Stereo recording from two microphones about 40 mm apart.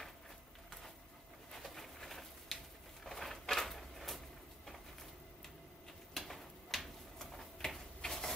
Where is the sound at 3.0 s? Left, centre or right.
Centre.